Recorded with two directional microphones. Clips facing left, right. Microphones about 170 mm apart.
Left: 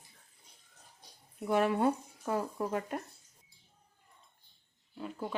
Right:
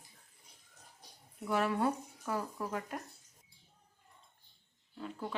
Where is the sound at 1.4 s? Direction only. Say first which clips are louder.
Left 4 dB; 25° left (ahead or behind).